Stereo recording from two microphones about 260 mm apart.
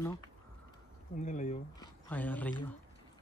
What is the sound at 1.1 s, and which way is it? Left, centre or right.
Speech, left.